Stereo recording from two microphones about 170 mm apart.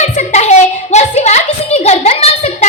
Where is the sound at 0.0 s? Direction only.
40° left (ahead or behind).